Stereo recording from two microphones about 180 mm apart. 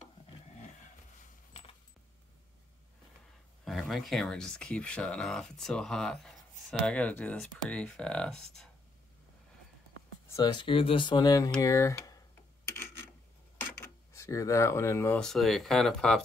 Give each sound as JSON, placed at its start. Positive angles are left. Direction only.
{"t": 1.5, "sound": "coin", "side_deg": 30}
{"t": 3.6, "sound": "speech", "side_deg": 0}
{"t": 10.2, "sound": "speech", "side_deg": 20}
{"t": 14.1, "sound": "speech", "side_deg": 15}
{"t": 15.1, "sound": "speech", "side_deg": 0}